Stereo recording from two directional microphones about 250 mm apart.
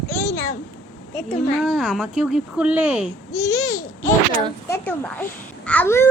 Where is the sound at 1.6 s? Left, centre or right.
Centre.